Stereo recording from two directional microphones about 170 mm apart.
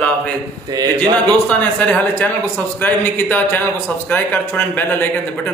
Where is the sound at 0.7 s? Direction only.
20° right (ahead or behind).